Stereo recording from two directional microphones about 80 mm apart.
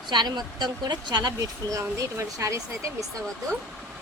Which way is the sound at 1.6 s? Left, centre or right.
Right.